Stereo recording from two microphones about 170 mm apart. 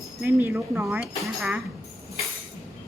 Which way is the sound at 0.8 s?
Centre (ahead or behind).